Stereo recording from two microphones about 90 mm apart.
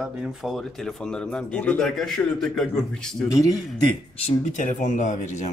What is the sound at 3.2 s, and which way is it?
Speech, 40° left (ahead or behind).